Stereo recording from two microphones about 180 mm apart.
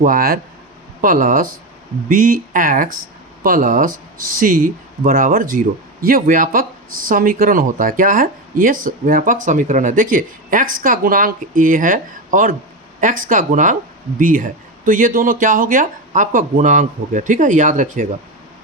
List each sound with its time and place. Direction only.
0.0 s speech: 50° right (ahead or behind)